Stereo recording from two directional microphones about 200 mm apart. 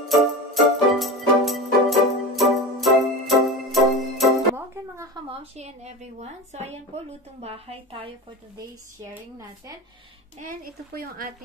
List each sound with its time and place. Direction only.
0.1 s music: centre (ahead or behind)
4.6 s music: 15° right (ahead or behind)
5.3 s a woman's voice: 30° right (ahead or behind)
10.4 s speech: 45° right (ahead or behind)